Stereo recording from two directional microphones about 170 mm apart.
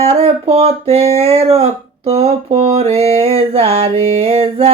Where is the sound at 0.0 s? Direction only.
35° right (ahead or behind).